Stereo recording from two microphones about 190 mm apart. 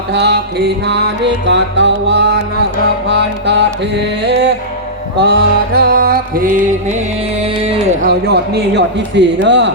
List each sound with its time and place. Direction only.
0.1 s music: 65° right (ahead or behind); by 6.9 s 45° right (ahead or behind)
7.4 s speech: 30° right (ahead or behind)
8.0 s music: 60° right (ahead or behind)